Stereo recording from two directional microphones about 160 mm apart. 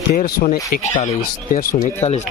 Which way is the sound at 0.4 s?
60° left (ahead or behind).